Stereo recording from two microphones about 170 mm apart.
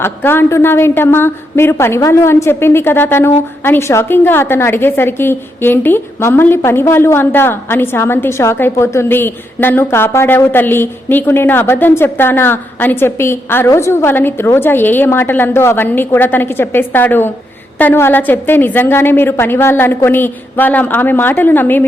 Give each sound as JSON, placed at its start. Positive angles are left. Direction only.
{"t": 0.0, "sound": "a woman's voice", "side_deg": 15}